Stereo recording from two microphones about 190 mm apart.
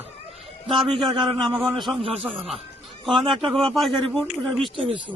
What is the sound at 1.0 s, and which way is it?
A man's voice, 25° right (ahead or behind).